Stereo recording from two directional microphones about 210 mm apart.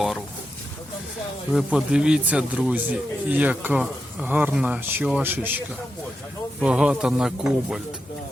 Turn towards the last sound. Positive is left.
turn(degrees=0)  # may be behind; listen again after turning